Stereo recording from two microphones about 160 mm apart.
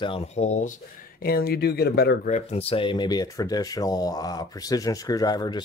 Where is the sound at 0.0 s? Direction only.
40° left (ahead or behind).